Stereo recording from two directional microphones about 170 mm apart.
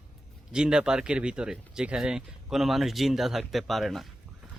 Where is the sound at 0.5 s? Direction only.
5° right (ahead or behind).